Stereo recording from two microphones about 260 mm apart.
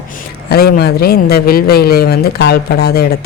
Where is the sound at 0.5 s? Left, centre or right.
Left.